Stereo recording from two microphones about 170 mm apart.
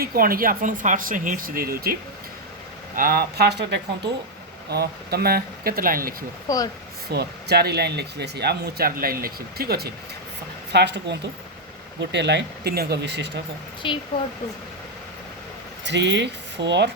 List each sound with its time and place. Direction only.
0.0 s speech: 60° right (ahead or behind)
6.5 s speech: 20° left (ahead or behind)
7.1 s speech: 70° right (ahead or behind)
10.7 s speech: 85° right
13.8 s speech: 30° left (ahead or behind)
15.8 s speech: 90° right